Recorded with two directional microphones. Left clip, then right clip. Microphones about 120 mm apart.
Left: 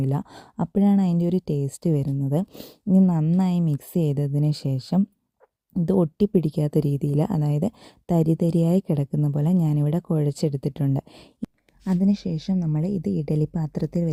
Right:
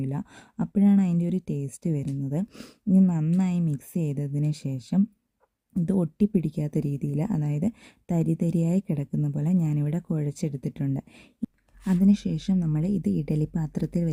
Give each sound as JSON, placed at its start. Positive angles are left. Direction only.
{"t": 0.0, "sound": "speech", "side_deg": 50}
{"t": 11.9, "sound": "a woman's voice", "side_deg": 15}